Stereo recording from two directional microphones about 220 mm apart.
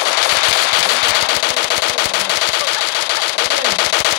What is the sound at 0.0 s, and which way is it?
Machine gun, 50° left (ahead or behind).